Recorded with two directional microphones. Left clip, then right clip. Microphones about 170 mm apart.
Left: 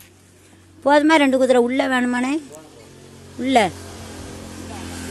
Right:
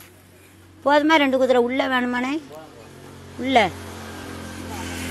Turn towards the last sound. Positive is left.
turn(degrees=-10)  # may be behind; listen again after turning